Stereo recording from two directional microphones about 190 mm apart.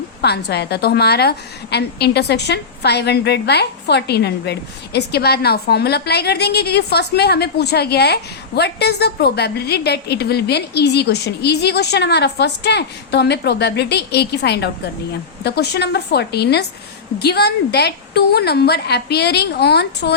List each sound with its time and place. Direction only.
0.2 s a woman's voice: 60° left (ahead or behind)